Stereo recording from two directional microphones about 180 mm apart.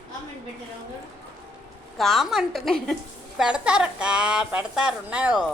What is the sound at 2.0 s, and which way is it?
A woman's voice, centre (ahead or behind).